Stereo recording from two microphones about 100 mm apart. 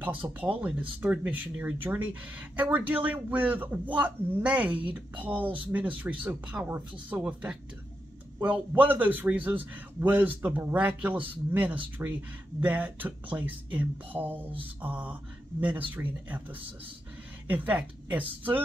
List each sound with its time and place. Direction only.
0.0 s speech: 15° right (ahead or behind)